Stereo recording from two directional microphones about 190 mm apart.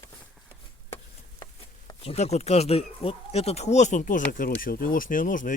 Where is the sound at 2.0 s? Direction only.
35° left (ahead or behind).